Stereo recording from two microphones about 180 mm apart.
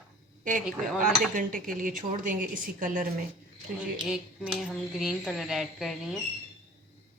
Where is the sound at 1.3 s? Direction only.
50° right (ahead or behind).